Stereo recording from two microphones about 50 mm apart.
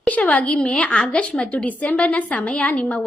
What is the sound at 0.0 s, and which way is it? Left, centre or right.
A woman's voice, left.